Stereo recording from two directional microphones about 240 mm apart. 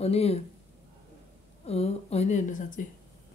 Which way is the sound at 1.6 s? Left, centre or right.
Left.